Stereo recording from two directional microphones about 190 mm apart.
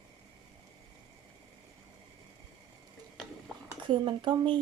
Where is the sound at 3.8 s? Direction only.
25° right (ahead or behind).